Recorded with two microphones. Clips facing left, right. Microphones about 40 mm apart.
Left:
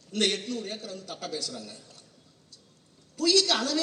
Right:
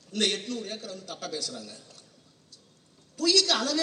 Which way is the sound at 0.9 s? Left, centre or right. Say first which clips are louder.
Even; left.